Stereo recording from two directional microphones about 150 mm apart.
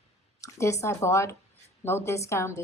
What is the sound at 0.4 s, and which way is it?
A woman's voice, 20° left (ahead or behind).